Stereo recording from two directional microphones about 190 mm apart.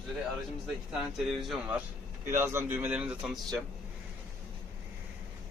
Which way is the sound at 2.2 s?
15° right (ahead or behind).